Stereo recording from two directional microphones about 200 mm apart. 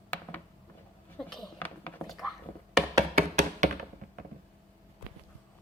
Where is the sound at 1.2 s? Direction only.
5° left (ahead or behind).